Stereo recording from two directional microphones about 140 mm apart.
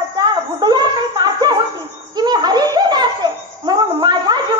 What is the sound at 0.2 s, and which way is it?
Chuckle, 30° right (ahead or behind).